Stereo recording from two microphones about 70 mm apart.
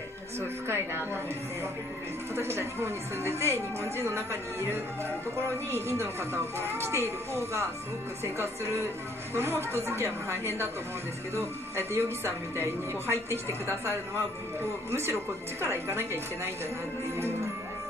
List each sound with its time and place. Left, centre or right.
0.7 s speech: right